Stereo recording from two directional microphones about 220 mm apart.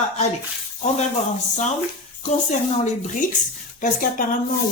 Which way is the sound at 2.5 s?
30° left (ahead or behind).